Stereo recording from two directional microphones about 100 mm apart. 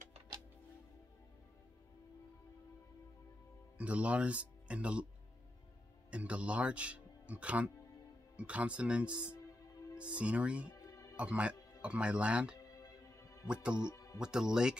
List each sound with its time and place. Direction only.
3.7 s speech: 15° right (ahead or behind)
6.0 s speech: 10° right (ahead or behind)
10.7 s music: 35° left (ahead or behind)
11.1 s speech: 10° right (ahead or behind)
12.8 s music: 35° left (ahead or behind)
13.5 s speech: 10° right (ahead or behind)
13.8 s speech: 30° left (ahead or behind)
14.2 s speech: 5° right (ahead or behind)